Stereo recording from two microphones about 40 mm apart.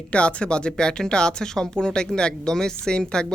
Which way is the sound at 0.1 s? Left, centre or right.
Left.